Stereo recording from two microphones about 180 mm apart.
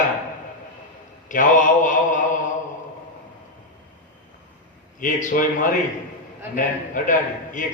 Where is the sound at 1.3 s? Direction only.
45° left (ahead or behind).